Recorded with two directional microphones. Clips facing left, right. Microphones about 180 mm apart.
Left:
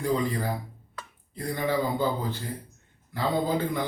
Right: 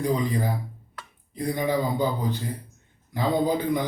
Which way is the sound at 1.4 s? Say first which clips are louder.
Right 2 dB; 15° right (ahead or behind).